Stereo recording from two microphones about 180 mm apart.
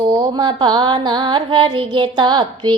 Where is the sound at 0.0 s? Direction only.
20° right (ahead or behind).